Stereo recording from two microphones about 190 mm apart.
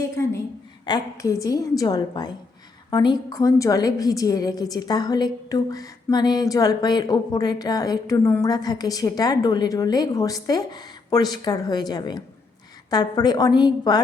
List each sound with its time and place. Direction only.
0.9 s a woman's voice: 20° left (ahead or behind)